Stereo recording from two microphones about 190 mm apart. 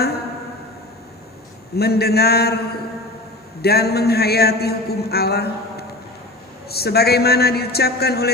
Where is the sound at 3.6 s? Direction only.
55° left (ahead or behind).